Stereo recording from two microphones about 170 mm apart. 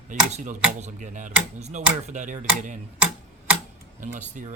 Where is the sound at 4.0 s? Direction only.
45° right (ahead or behind).